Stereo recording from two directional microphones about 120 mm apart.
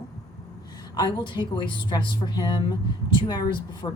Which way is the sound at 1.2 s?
40° left (ahead or behind).